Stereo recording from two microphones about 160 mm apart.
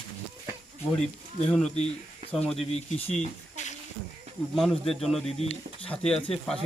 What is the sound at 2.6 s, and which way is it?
Speech, 40° left (ahead or behind).